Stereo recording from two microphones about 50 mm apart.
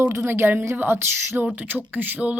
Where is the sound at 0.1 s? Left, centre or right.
Right.